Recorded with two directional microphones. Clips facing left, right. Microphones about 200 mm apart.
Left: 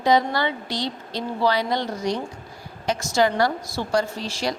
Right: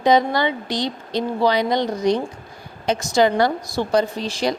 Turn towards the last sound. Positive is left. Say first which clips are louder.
# right 5 dB
turn(degrees=-20)  # may be behind; listen again after turning